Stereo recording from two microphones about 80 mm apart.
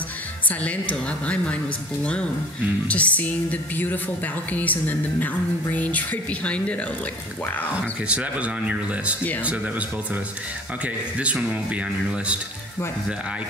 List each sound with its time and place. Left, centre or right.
0.5 s a woman's voice: centre
2.9 s speech: centre
8.1 s speech: centre
11.1 s speech: centre